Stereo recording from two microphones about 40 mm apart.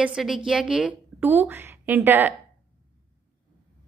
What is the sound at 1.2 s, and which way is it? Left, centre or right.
A woman's voice, right.